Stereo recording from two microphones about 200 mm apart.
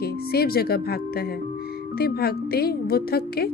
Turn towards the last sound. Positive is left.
turn(degrees=50)  # may be behind; listen again after turning